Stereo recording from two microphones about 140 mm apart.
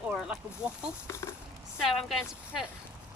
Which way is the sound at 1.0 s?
20° left (ahead or behind).